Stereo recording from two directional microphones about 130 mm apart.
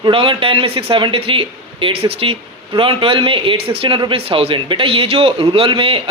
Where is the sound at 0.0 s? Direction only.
40° right (ahead or behind).